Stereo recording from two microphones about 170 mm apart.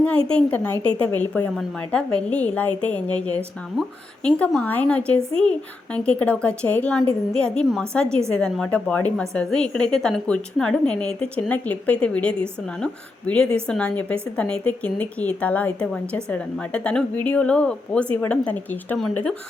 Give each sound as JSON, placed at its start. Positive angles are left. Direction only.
{"t": 0.0, "sound": "a woman's voice", "side_deg": 5}